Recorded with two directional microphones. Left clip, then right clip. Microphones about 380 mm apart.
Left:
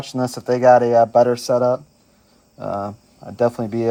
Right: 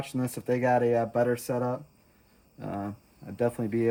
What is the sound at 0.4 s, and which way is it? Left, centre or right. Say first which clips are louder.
Speech: left 12 dB; left.